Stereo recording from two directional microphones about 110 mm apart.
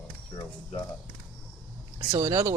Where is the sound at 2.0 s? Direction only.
35° right (ahead or behind).